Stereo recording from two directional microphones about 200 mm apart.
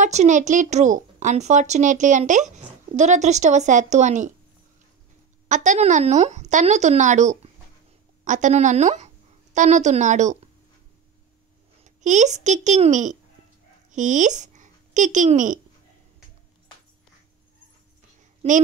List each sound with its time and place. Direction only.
0.0 s a woman's voice: 35° right (ahead or behind)
5.5 s a woman's voice: 40° right (ahead or behind)
11.8 s a child's voice: 35° right (ahead or behind)